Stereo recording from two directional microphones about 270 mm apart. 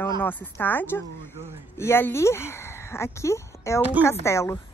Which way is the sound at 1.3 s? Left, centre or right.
Centre.